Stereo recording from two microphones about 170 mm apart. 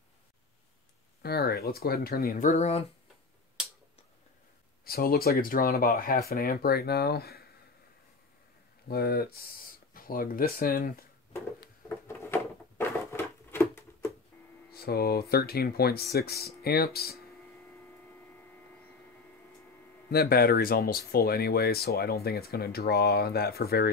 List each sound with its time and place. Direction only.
1.2 s speech: 65° left (ahead or behind)
2.5 s speech: 40° left (ahead or behind)
4.8 s speech: 65° left (ahead or behind)
8.8 s speech: 65° left (ahead or behind)
12.1 s a sound: 15° left (ahead or behind)
14.7 s speech: 65° left (ahead or behind)
20.1 s speech: 65° left (ahead or behind)